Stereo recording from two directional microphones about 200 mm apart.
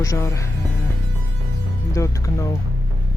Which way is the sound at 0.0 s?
15° left (ahead or behind).